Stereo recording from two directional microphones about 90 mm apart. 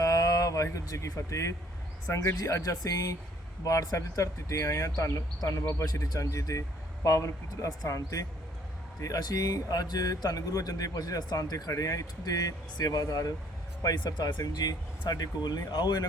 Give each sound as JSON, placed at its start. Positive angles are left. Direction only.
{"t": 0.0, "sound": "a sound", "side_deg": 40}
{"t": 2.0, "sound": "speech", "side_deg": 30}
{"t": 5.8, "sound": "speech", "side_deg": 45}
{"t": 13.8, "sound": "speech", "side_deg": 55}